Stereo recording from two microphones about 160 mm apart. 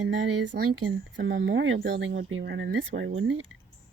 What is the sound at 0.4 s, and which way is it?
Speech, 90° right.